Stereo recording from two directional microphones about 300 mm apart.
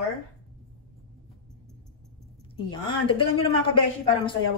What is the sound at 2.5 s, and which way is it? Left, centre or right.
A woman's voice, centre.